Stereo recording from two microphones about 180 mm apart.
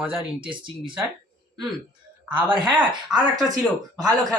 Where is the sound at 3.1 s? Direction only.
5° right (ahead or behind).